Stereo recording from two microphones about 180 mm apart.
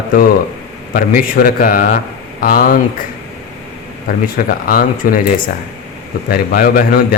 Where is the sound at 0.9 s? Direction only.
55° left (ahead or behind).